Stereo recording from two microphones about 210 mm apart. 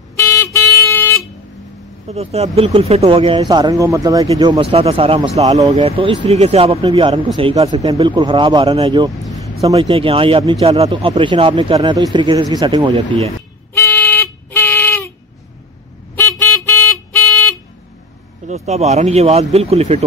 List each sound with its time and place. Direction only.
0.1 s vehicle: 15° left (ahead or behind)
2.0 s speech: 30° right (ahead or behind)
13.7 s a sound: 10° left (ahead or behind)
16.2 s vehicle: 10° left (ahead or behind)
18.5 s speech: 30° right (ahead or behind)